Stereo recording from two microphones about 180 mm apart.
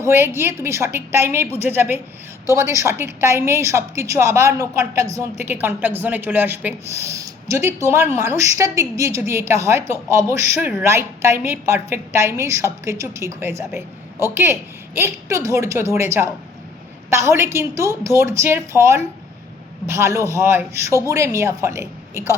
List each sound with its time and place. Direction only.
0.0 s a woman's voice: 15° right (ahead or behind)